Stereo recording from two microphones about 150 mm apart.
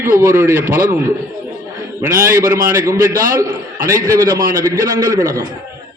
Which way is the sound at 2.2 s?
15° right (ahead or behind).